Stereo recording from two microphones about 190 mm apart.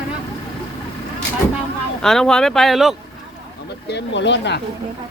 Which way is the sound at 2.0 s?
5° left (ahead or behind).